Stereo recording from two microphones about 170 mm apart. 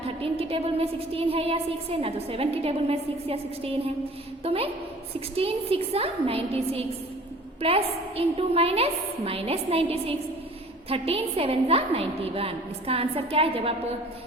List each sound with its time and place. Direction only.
0.0 s a woman's voice: 35° right (ahead or behind)